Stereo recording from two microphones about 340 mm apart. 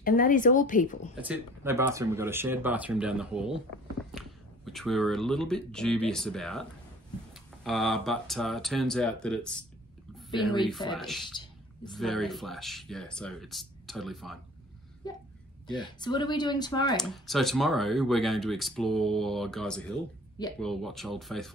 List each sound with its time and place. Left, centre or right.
0.0 s speech: left
1.1 s speech: centre
4.1 s a sound: centre
4.6 s speech: centre
10.3 s speech: centre
11.0 s speech: centre
15.7 s speech: centre
16.9 s speech: centre